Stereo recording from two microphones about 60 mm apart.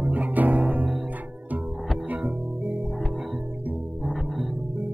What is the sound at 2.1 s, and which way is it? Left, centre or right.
Music, right.